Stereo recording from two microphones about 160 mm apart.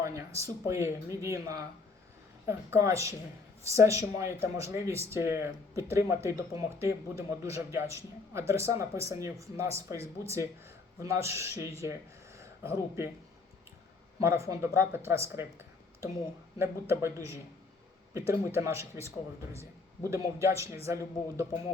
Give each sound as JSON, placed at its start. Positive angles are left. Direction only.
{"t": 0.0, "sound": "speech", "side_deg": -20}
{"t": 14.2, "sound": "speech", "side_deg": -20}